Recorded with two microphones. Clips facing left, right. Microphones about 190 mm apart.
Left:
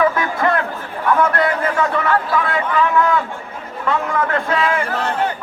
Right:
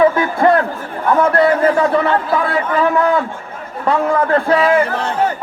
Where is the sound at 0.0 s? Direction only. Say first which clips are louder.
Right 5 dB; 30° right (ahead or behind).